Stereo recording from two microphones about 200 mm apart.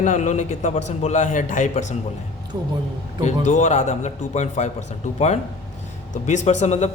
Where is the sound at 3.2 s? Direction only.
35° left (ahead or behind).